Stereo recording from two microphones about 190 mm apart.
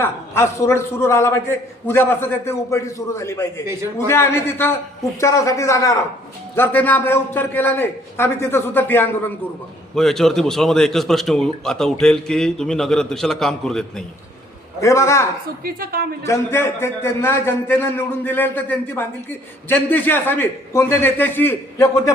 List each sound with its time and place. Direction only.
0.0 s a man's voice: 15° left (ahead or behind)
14.8 s a man's voice: 15° left (ahead or behind)
15.6 s a woman's voice: 50° right (ahead or behind)
16.2 s a man's voice: 15° left (ahead or behind)